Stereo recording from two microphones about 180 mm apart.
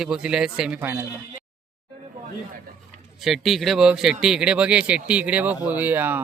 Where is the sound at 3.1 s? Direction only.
Centre (ahead or behind).